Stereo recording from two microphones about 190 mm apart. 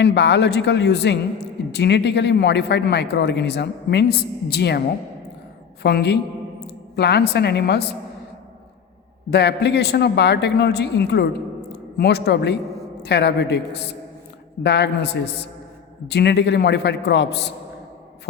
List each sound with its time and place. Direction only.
0.0 s a man's voice: 65° left (ahead or behind)
5.8 s a man's voice: 60° left (ahead or behind)
9.3 s a man's voice: 60° left (ahead or behind)